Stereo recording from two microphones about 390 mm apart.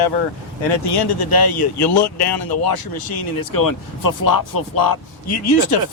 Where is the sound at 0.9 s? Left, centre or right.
Left.